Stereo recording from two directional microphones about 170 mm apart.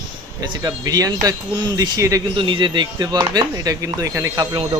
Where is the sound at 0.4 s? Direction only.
20° right (ahead or behind).